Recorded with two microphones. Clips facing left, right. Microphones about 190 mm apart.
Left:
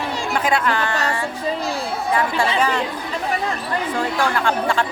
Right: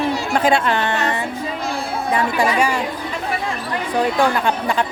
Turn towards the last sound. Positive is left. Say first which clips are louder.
# even
turn(degrees=-15)  # may be behind; listen again after turning